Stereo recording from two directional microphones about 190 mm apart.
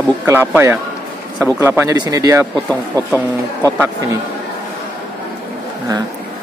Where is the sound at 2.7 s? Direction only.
5° left (ahead or behind).